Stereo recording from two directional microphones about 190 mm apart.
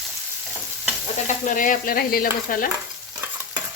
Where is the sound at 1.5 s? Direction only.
45° left (ahead or behind).